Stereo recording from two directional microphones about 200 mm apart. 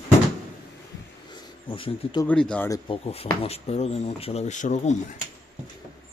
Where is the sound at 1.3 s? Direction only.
25° left (ahead or behind).